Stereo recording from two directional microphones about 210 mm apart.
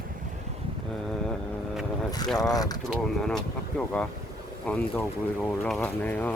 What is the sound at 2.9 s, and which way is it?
Speech, centre (ahead or behind).